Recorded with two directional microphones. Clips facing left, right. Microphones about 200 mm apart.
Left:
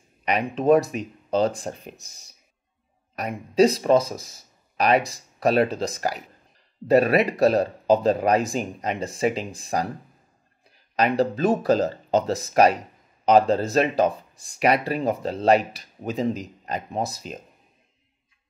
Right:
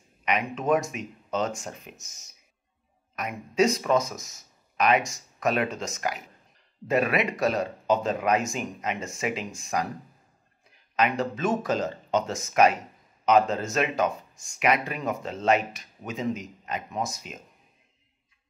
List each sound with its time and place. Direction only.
0.2 s speech: 35° left (ahead or behind)